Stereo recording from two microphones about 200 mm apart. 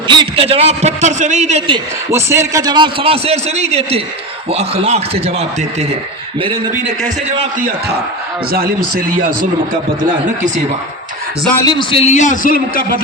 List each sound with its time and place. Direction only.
0.1 s a man's voice: 25° right (ahead or behind)
2.1 s a man's voice: 15° right (ahead or behind); by 5.5 s 30° right (ahead or behind)
8.5 s speech: 45° right (ahead or behind)
11.5 s a man's voice: 20° left (ahead or behind); by 12.8 s 45° left (ahead or behind)